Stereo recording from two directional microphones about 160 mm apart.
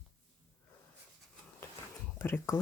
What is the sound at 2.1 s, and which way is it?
Speech, 15° left (ahead or behind).